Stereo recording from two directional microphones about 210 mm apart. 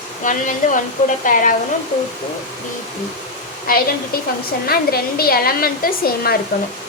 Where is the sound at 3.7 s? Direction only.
45° left (ahead or behind).